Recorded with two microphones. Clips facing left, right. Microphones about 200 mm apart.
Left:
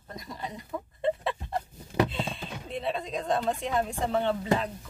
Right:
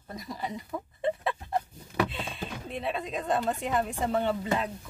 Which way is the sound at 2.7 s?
Centre (ahead or behind).